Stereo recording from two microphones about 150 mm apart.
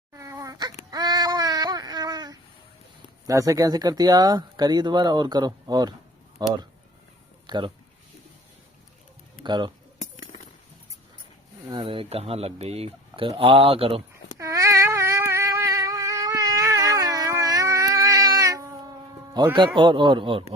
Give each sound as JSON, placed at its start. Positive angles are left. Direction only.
{"t": 0.1, "sound": "a sound", "side_deg": -20}
{"t": 3.2, "sound": "speech", "side_deg": -20}
{"t": 9.4, "sound": "speech", "side_deg": -30}
{"t": 11.7, "sound": "speech", "side_deg": -35}
{"t": 14.3, "sound": "a sound", "side_deg": -20}
{"t": 19.5, "sound": "speech", "side_deg": -30}